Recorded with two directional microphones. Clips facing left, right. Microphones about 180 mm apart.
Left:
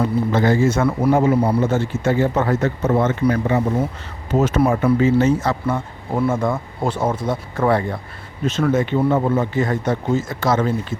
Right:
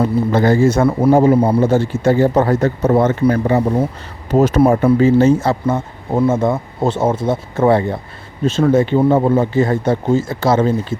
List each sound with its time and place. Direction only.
0.0 s a man's voice: 40° right (ahead or behind)